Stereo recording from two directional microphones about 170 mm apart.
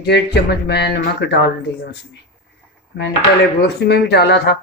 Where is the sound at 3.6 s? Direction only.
75° left (ahead or behind).